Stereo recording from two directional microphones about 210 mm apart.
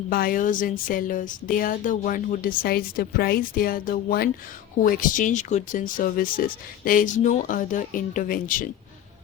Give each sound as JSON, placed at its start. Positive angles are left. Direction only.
{"t": 0.1, "sound": "speech", "side_deg": 45}